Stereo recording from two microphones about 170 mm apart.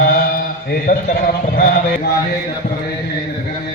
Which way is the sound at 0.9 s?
60° left (ahead or behind).